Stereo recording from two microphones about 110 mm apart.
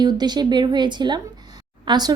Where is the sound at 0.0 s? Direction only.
40° right (ahead or behind).